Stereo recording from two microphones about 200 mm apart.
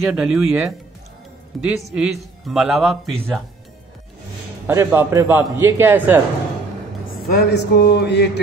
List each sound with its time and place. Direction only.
0.0 s a man's voice: 5° right (ahead or behind)
4.6 s a man's voice: 15° right (ahead or behind)
7.2 s a sound: 55° left (ahead or behind)